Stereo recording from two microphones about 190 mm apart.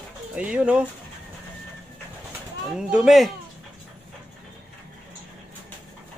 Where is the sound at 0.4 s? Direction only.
5° right (ahead or behind).